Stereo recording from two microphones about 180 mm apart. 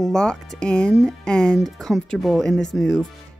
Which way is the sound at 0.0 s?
5° left (ahead or behind).